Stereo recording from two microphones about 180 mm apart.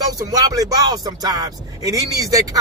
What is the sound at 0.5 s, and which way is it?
Speech, 20° right (ahead or behind).